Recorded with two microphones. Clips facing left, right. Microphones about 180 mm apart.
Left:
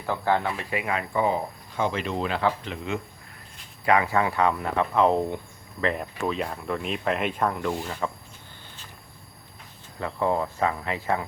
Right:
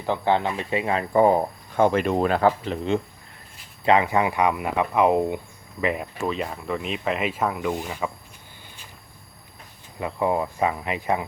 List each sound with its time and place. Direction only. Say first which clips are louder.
0.0 s speech: right 3 dB; 20° right (ahead or behind)
1.1 s speech: right 8 dB; 50° right (ahead or behind)
3.8 s speech: right 3 dB; 20° right (ahead or behind)
10.0 s speech: right 2 dB; 15° right (ahead or behind)